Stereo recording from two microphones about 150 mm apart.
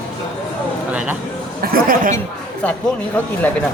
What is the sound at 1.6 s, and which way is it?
Speech, 75° right (ahead or behind).